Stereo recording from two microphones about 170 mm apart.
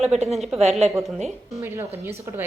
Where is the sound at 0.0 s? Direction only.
40° right (ahead or behind).